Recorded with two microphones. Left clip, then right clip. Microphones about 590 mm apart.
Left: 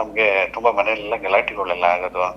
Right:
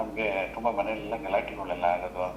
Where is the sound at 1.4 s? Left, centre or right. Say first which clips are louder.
Left 11 dB; left.